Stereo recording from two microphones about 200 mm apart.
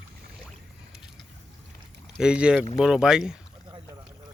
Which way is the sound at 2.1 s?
5° right (ahead or behind).